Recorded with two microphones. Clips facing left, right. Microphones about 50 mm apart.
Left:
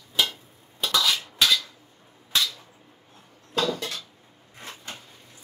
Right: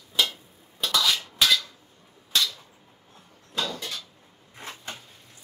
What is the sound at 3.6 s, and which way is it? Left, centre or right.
Dishes, left.